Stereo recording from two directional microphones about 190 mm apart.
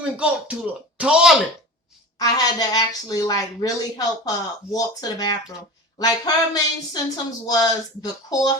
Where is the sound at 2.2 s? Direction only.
20° left (ahead or behind).